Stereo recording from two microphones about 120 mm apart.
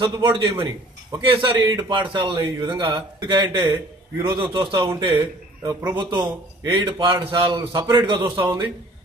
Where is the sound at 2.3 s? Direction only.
20° right (ahead or behind).